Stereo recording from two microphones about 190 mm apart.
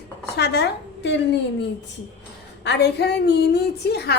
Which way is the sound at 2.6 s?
65° left (ahead or behind).